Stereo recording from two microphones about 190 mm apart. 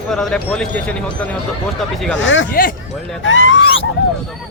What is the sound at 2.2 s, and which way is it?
Speech, 85° left.